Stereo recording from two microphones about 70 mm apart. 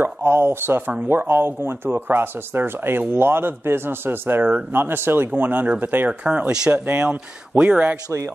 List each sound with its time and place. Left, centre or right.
0.0 s speech: right
6.2 s speech: centre